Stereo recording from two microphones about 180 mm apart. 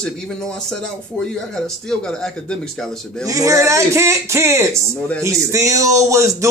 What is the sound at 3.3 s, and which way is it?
Speech, 20° right (ahead or behind).